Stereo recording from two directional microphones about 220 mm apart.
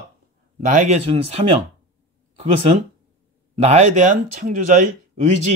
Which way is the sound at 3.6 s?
30° right (ahead or behind).